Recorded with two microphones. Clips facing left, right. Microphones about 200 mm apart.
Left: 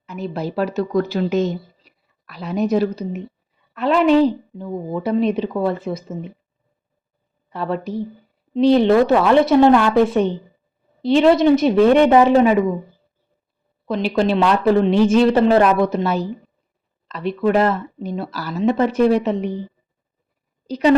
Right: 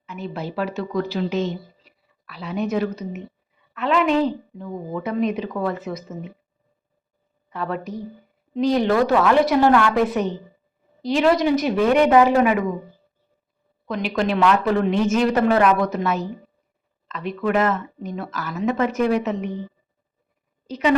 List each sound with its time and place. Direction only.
0.0 s a woman's voice: 40° left (ahead or behind)
7.5 s a woman's voice: 30° left (ahead or behind)
13.8 s a woman's voice: 30° left (ahead or behind)
20.7 s a woman's voice: 35° left (ahead or behind)